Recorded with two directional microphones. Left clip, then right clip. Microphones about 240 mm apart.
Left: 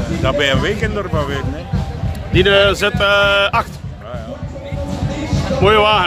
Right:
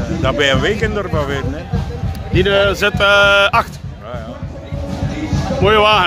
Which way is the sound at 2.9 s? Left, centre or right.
Centre.